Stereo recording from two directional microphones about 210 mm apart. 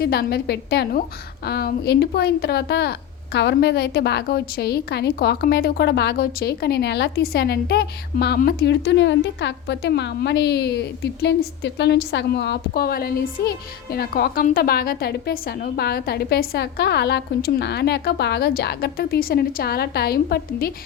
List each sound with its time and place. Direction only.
0.0 s a woman's voice: 50° left (ahead or behind)